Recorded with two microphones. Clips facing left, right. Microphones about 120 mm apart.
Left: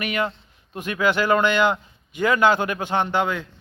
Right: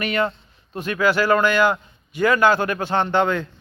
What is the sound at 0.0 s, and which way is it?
A man's voice, 15° left (ahead or behind).